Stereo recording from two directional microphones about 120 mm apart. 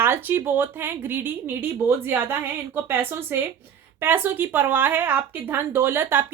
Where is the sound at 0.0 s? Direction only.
15° right (ahead or behind).